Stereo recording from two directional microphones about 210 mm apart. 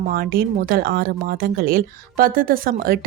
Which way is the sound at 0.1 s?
45° right (ahead or behind).